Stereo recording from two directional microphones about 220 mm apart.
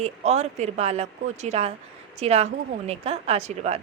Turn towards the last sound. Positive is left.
turn(degrees=-30)  # may be behind; listen again after turning